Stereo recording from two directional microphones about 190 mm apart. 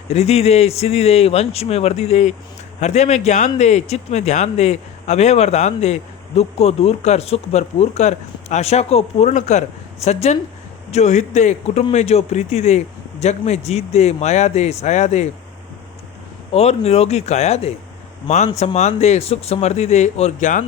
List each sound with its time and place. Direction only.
0.1 s speech: 35° left (ahead or behind)
16.5 s speech: 35° left (ahead or behind)